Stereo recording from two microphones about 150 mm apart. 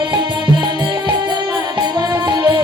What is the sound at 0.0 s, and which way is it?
Music, 30° right (ahead or behind).